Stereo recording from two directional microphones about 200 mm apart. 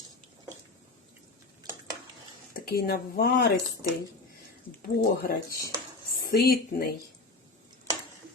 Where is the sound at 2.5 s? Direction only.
50° left (ahead or behind).